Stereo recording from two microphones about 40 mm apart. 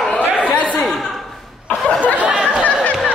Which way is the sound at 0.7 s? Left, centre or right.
Centre.